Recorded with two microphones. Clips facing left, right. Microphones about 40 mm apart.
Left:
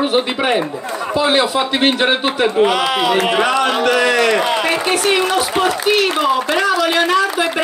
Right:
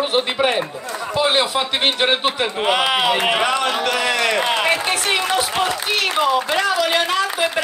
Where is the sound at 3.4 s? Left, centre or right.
Centre.